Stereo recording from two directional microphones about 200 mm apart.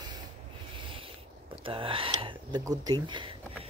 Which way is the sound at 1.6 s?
25° right (ahead or behind).